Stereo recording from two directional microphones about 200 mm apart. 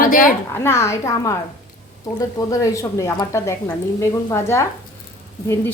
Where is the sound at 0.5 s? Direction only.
10° left (ahead or behind).